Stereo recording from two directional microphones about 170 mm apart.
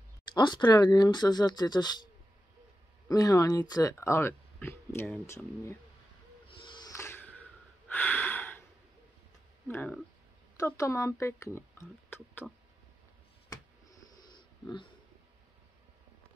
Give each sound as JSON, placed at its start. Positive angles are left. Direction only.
{"t": 0.3, "sound": "speech", "side_deg": 25}
{"t": 3.1, "sound": "speech", "side_deg": 20}
{"t": 6.4, "sound": "owl", "side_deg": 30}
{"t": 6.9, "sound": "a sound", "side_deg": 15}
{"t": 7.9, "sound": "snort", "side_deg": 10}
{"t": 9.7, "sound": "speech", "side_deg": 10}
{"t": 13.5, "sound": "a sound", "side_deg": 20}